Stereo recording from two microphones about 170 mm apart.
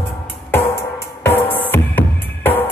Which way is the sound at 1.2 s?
10° left (ahead or behind).